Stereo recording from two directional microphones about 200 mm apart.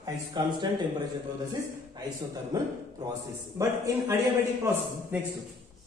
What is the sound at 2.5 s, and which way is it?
A man's voice, 20° right (ahead or behind).